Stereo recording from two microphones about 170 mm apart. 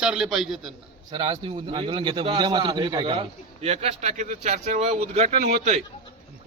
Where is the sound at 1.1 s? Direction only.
30° right (ahead or behind).